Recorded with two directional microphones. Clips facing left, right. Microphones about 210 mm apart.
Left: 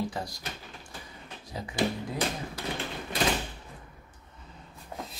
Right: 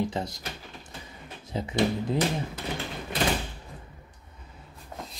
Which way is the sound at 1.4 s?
25° right (ahead or behind).